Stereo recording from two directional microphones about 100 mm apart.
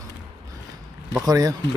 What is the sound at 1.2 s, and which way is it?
Speech, 35° right (ahead or behind).